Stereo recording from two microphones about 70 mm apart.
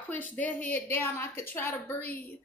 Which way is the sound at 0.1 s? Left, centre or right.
Left.